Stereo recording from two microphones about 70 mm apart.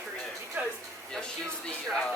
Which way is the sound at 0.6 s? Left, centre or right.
Right.